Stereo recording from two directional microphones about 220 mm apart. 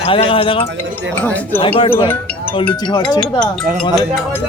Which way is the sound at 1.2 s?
5° left (ahead or behind).